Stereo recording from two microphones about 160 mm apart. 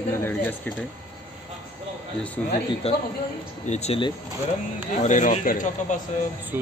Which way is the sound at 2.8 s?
40° left (ahead or behind).